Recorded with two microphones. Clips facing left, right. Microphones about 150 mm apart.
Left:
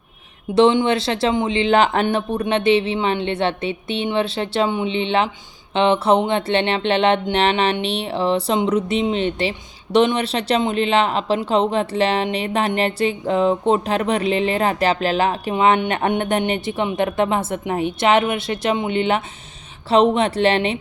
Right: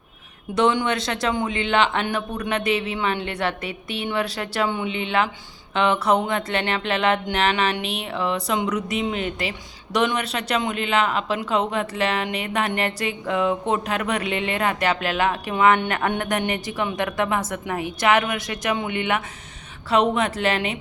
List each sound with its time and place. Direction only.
0.5 s music: 25° left (ahead or behind)